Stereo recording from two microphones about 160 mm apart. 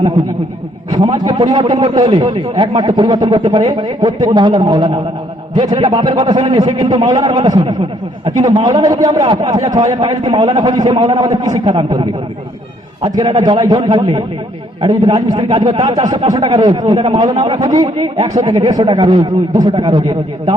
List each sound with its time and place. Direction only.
0.9 s a man's voice: 25° right (ahead or behind)